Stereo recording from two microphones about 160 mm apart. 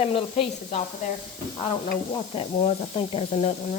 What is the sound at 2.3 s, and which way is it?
Speech, 35° left (ahead or behind).